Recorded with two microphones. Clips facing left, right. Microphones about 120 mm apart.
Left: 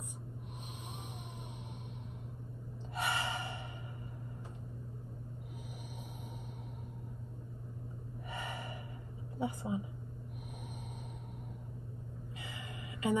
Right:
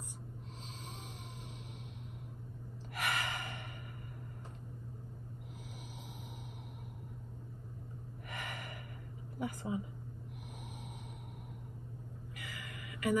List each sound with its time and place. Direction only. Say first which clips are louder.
3.0 s gasp: left 2 dB; 25° left (ahead or behind)
8.3 s gasp: left 2 dB; 25° left (ahead or behind)
9.4 s speech: left 2 dB; 25° left (ahead or behind)
12.4 s gasp: left 1 dB; 25° left (ahead or behind)